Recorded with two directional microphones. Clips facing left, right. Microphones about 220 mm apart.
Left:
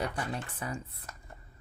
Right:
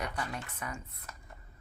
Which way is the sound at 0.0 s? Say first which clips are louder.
Left 3 dB; 30° left (ahead or behind).